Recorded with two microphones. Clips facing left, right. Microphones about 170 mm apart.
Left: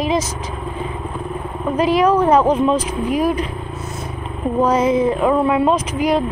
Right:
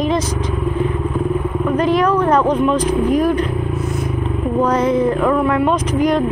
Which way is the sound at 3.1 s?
10° left (ahead or behind).